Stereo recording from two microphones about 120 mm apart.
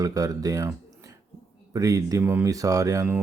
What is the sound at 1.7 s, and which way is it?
Speech, 30° right (ahead or behind).